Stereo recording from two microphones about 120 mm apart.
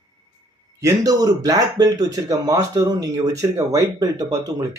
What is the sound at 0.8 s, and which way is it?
Speech, 30° right (ahead or behind).